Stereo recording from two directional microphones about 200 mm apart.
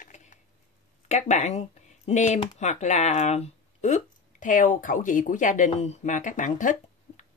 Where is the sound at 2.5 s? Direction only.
35° left (ahead or behind).